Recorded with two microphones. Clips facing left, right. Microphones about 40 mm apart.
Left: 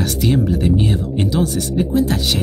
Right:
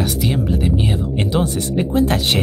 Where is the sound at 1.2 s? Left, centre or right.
Right.